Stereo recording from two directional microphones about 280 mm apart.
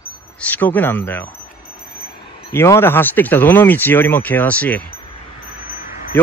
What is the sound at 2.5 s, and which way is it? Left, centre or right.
Speech, centre.